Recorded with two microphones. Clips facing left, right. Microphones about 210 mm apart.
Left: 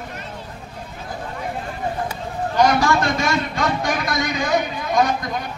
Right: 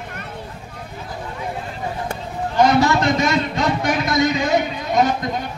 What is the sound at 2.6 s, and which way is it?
A man's voice, 25° right (ahead or behind).